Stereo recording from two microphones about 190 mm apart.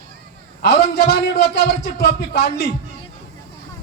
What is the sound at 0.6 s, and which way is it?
A man's voice, 60° left (ahead or behind).